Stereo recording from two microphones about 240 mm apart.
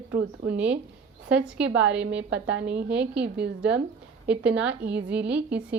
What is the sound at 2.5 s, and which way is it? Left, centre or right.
Speech, right.